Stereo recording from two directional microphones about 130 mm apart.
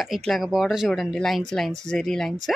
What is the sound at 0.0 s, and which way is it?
A woman's voice, centre (ahead or behind).